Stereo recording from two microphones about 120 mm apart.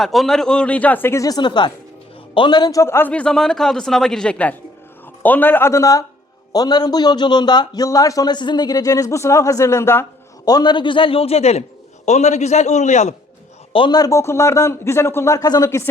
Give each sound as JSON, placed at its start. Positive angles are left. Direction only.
{"t": 0.0, "sound": "a man's voice", "side_deg": 0}
{"t": 1.4, "sound": "speech", "side_deg": 40}
{"t": 2.8, "sound": "a man's voice", "side_deg": 20}
{"t": 3.1, "sound": "a man's voice", "side_deg": 10}
{"t": 10.4, "sound": "a man's voice", "side_deg": 35}
{"t": 12.0, "sound": "a man's voice", "side_deg": 70}
{"t": 13.7, "sound": "a man's voice", "side_deg": 40}